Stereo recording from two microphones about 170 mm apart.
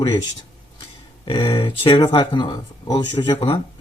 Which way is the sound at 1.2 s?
30° left (ahead or behind).